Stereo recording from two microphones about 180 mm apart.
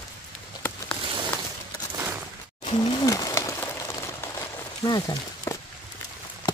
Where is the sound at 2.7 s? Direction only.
25° left (ahead or behind).